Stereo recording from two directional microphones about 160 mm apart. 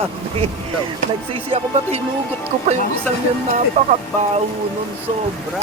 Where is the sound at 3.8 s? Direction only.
45° right (ahead or behind).